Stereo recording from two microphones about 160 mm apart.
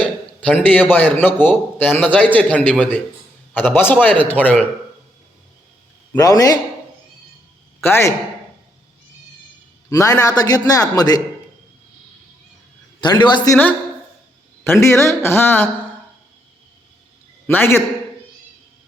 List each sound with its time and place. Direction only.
0.0 s a man's voice: 10° left (ahead or behind)
6.1 s a man's voice: 20° left (ahead or behind)
7.8 s a man's voice: 15° left (ahead or behind)
9.9 s a man's voice: 20° left (ahead or behind)
13.0 s a man's voice: 30° left (ahead or behind)
14.6 s speech: 15° left (ahead or behind)
17.5 s speech: 15° left (ahead or behind)